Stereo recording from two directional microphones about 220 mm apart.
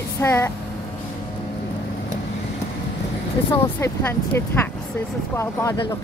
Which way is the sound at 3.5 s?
10° left (ahead or behind).